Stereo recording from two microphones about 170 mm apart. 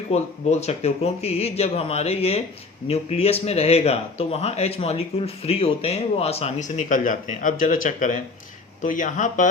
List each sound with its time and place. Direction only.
0.1 s speech: 40° left (ahead or behind)